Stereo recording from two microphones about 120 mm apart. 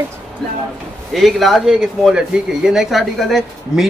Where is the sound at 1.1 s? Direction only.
Centre (ahead or behind).